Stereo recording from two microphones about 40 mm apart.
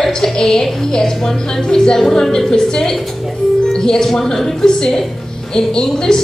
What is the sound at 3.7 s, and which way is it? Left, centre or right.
A woman's voice, centre.